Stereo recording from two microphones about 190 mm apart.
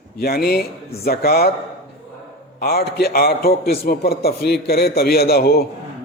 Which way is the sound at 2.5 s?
55° left (ahead or behind).